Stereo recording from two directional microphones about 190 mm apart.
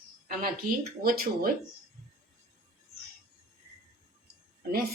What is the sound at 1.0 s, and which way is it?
Speech, 50° right (ahead or behind).